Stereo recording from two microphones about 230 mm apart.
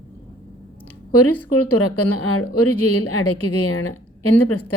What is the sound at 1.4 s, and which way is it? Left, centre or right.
A woman's voice, left.